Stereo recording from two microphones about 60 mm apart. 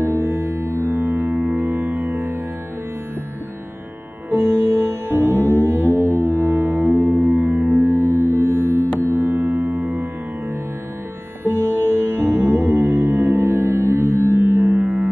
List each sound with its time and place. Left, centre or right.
0.0 s music: right
4.3 s music: right
11.5 s sitar: left
11.8 s music: right